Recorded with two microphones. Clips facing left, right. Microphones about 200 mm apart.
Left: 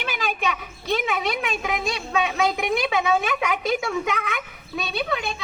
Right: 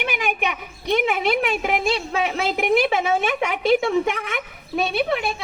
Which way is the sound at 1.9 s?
30° right (ahead or behind).